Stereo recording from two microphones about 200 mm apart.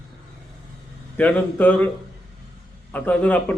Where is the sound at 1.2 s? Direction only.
5° left (ahead or behind).